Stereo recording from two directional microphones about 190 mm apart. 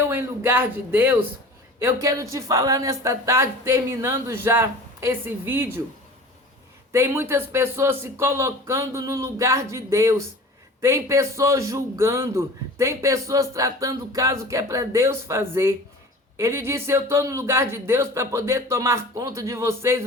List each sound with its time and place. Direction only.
0.0 s a man's voice: 15° right (ahead or behind)
6.9 s a man's voice: 15° right (ahead or behind)